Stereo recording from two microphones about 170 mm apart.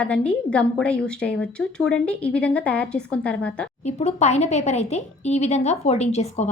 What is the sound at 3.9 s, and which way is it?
A woman's voice, 40° left (ahead or behind).